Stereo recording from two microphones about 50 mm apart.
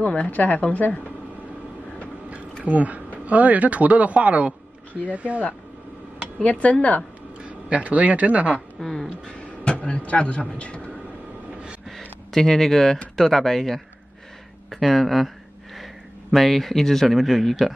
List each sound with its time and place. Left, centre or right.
0.0 s speech: left
2.6 s a man's voice: right
6.4 s speech: left
7.4 s speech: right
8.7 s speech: centre
9.7 s speech: left
12.4 s speech: centre